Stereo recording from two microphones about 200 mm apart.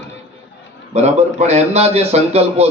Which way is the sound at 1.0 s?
35° right (ahead or behind).